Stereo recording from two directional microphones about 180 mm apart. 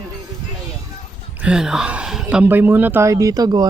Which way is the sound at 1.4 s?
5° right (ahead or behind).